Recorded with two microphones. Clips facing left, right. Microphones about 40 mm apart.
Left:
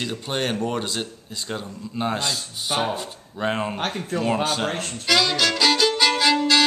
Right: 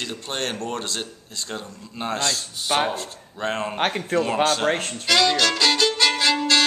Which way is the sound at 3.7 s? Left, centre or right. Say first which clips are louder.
Right 4 dB; right.